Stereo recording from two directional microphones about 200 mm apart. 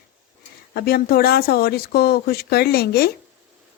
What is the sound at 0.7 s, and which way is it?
Speech, 50° left (ahead or behind).